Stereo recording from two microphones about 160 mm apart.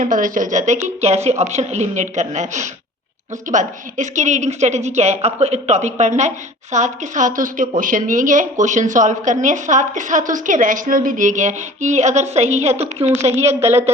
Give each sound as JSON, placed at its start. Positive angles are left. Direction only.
{"t": 0.0, "sound": "a woman's voice", "side_deg": -55}
{"t": 13.6, "sound": "speech", "side_deg": -15}